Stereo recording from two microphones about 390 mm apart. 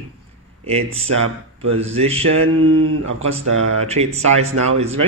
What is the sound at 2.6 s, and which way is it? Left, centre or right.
Speech, right.